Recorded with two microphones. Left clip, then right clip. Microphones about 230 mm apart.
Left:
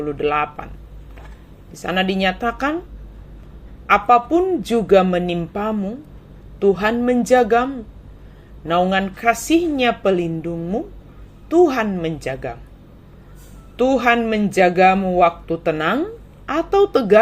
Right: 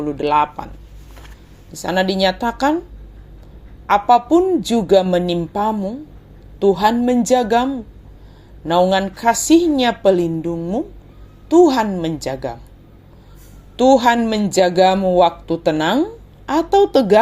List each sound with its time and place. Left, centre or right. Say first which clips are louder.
0.0 s speech: right 3 dB; right
1.7 s speech: right 2 dB; right
3.8 s speech: right 1 dB; centre
8.9 s speech: right 2 dB; right
10.2 s speech: right 4 dB; right
11.4 s speech: right 3 dB; right
13.7 s speech: right 3 dB; right